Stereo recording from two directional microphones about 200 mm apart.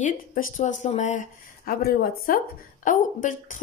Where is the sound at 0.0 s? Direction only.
40° left (ahead or behind).